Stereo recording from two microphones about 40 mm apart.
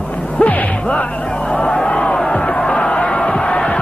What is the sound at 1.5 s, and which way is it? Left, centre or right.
Crowd, left.